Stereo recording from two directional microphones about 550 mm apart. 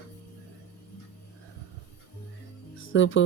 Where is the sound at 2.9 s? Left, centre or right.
Left.